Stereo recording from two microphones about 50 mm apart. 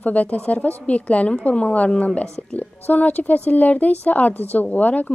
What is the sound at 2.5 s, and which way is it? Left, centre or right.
Speech, left.